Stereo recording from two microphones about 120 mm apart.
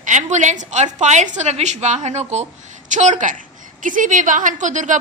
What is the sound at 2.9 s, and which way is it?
A woman's voice, 85° right.